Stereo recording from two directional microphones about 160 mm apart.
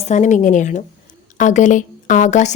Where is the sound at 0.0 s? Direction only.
50° left (ahead or behind).